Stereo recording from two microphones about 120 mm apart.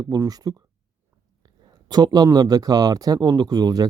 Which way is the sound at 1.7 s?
35° right (ahead or behind).